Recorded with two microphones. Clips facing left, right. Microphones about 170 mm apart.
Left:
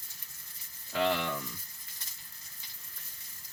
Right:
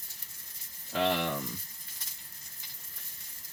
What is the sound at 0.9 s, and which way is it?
Speech, 20° right (ahead or behind).